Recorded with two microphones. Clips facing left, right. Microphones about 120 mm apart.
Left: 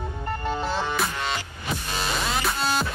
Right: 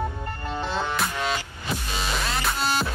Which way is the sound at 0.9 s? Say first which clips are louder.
Right 1 dB; centre (ahead or behind).